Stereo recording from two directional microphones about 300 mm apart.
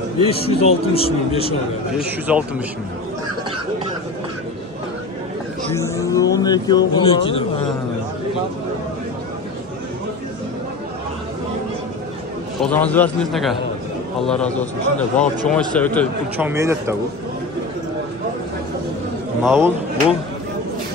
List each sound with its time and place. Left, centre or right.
0.3 s a man's voice: centre
2.0 s a man's voice: centre
5.8 s a man's voice: centre
12.5 s a man's voice: centre
16.3 s speech: centre
19.4 s speech: centre